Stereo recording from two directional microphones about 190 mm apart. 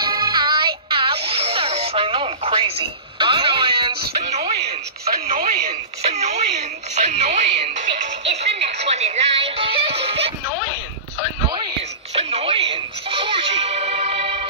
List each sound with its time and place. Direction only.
0.0 s music: 20° right (ahead or behind)
0.8 s radio: 25° right (ahead or behind)
3.2 s music: 25° right (ahead or behind)
4.3 s a sound: 35° right (ahead or behind)
5.2 s radio: 35° right (ahead or behind)
5.7 s a sound: 35° right (ahead or behind)
7.0 s music: 35° right (ahead or behind)
11.4 s whispering: 25° right (ahead or behind)
12.2 s music: 30° right (ahead or behind)